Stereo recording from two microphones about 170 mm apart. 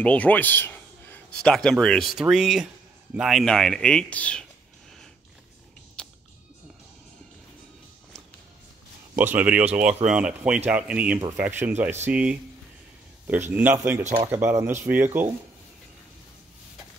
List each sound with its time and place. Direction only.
0.0 s speech: 10° left (ahead or behind)
6.0 s music: 5° left (ahead or behind)
9.1 s speech: 10° right (ahead or behind)
14.0 s speech: 45° right (ahead or behind)
14.3 s speech: 15° right (ahead or behind)